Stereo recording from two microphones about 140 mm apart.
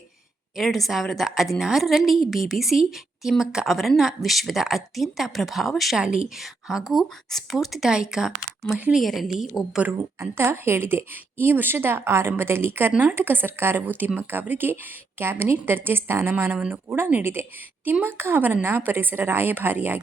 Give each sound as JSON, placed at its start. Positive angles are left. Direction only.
{"t": 0.5, "sound": "a woman's voice", "side_deg": 0}
{"t": 10.2, "sound": "speech", "side_deg": -20}